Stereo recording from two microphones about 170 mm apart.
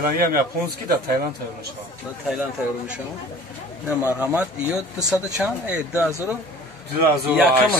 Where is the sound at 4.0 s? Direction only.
10° right (ahead or behind).